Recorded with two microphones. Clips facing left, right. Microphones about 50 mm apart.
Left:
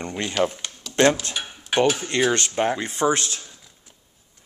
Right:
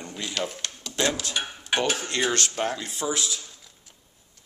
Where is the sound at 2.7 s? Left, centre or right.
Left.